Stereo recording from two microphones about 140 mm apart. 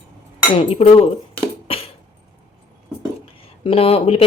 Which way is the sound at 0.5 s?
40° left (ahead or behind).